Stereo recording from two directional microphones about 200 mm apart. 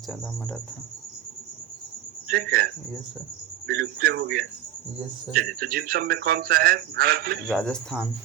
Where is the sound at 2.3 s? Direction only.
45° right (ahead or behind).